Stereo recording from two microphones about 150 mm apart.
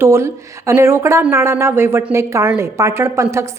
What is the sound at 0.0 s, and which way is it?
Speech, 20° right (ahead or behind).